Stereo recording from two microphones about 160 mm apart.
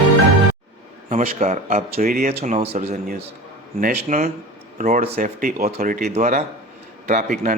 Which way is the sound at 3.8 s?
55° right (ahead or behind).